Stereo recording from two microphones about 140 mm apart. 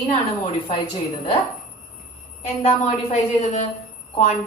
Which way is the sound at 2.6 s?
50° left (ahead or behind).